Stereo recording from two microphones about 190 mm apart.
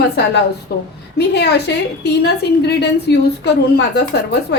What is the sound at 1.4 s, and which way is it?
A woman's voice, 60° left (ahead or behind).